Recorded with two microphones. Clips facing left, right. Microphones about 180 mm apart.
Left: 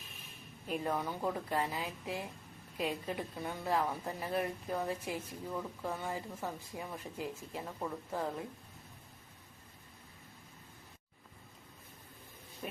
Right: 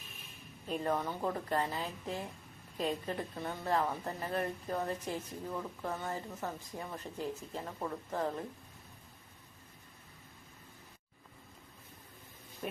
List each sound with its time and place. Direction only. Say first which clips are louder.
0.7 s a woman's voice: right 1 dB; 5° left (ahead or behind)